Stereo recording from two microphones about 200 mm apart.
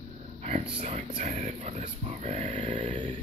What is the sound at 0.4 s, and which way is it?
Speech, 35° right (ahead or behind).